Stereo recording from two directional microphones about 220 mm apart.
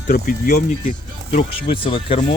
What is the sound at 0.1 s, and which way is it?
Speech, 40° left (ahead or behind).